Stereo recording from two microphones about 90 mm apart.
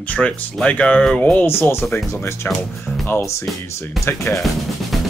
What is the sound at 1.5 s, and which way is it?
Speech, 25° left (ahead or behind).